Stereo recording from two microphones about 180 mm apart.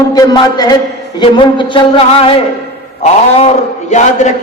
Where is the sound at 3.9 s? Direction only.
40° left (ahead or behind).